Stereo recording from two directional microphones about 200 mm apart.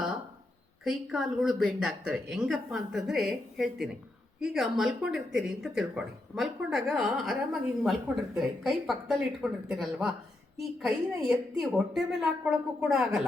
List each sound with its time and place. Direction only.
0.9 s speech: centre (ahead or behind)